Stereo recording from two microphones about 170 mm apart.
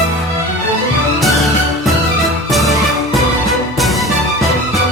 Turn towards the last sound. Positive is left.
turn(degrees=0)  # may be behind; listen again after turning